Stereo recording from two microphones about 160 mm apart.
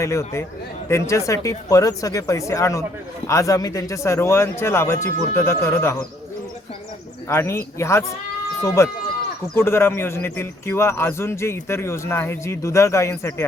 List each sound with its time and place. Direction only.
0.0 s a man's voice: 15° left (ahead or behind)
7.3 s a man's voice: 15° left (ahead or behind)